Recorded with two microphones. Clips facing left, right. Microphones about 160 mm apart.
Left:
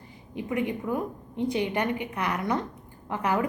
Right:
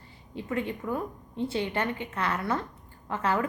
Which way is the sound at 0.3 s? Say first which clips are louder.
Left 3 dB; 15° left (ahead or behind).